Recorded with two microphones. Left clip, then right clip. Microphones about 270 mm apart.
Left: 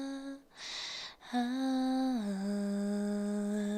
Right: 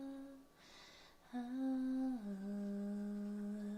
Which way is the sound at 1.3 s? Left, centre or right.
Left.